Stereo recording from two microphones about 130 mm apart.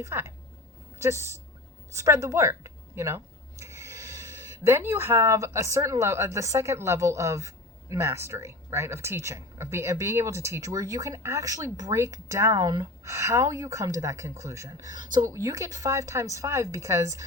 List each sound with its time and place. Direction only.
0.0 s a woman's voice: 20° right (ahead or behind)